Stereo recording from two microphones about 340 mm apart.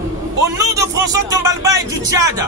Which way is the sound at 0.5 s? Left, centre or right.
Centre.